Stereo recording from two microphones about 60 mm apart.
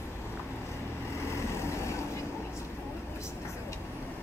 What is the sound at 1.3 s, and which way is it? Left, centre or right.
Vehicle, left.